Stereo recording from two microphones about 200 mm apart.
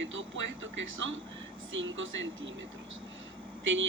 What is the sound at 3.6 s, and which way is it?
Speech, 70° right (ahead or behind).